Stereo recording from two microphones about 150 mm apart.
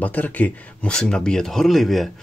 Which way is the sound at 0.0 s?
10° left (ahead or behind).